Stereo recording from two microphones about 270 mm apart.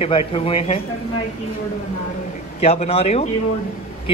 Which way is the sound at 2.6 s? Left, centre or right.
Left.